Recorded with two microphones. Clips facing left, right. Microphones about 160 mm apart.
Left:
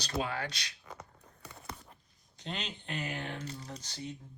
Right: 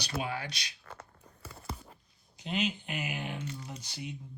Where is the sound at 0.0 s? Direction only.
10° right (ahead or behind).